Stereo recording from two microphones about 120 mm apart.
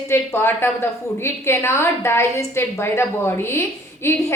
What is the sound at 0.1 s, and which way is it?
A woman's voice, 20° left (ahead or behind).